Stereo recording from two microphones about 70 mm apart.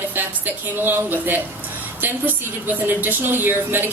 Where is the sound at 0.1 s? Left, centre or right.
Right.